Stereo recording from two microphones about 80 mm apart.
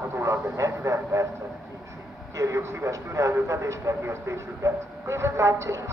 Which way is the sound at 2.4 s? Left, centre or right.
Right.